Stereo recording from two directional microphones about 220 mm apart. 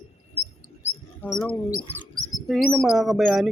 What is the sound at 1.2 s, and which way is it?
Speech, 5° left (ahead or behind).